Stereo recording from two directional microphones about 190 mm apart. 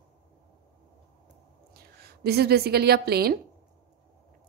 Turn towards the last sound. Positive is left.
turn(degrees=-55)  # may be behind; listen again after turning